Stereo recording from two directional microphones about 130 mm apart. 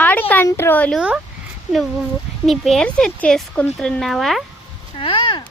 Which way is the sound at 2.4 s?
Centre (ahead or behind).